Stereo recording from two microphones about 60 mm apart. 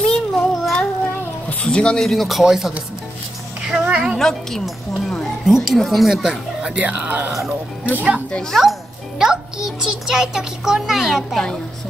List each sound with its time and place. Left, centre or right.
0.0 s child singing: centre
1.6 s music: centre
2.0 s speech: centre
3.6 s music: centre
4.2 s speech: centre
6.8 s speech: right
8.5 s a child's voice: centre